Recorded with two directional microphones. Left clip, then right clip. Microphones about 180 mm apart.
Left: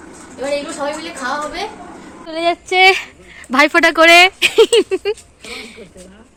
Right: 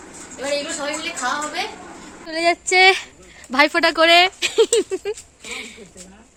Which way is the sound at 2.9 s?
Centre (ahead or behind).